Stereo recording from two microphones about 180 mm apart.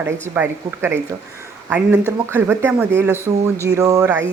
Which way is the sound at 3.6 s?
20° right (ahead or behind).